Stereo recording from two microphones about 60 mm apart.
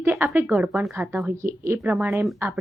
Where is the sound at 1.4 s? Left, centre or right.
Right.